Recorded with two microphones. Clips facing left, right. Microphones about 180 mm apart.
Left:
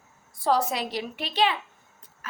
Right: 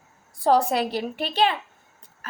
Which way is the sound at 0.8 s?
55° right (ahead or behind).